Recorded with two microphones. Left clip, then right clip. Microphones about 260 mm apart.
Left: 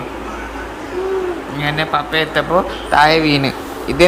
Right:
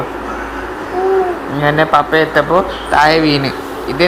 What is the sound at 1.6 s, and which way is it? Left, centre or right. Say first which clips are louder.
A man's voice: right 7 dB; centre.